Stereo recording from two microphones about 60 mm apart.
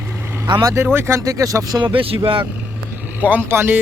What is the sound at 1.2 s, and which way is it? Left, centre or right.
Speech, right.